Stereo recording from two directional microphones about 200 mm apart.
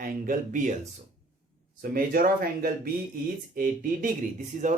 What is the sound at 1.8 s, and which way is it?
A man's voice, 45° right (ahead or behind).